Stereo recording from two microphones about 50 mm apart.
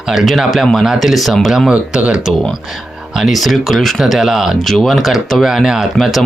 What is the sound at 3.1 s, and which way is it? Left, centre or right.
Speech, centre.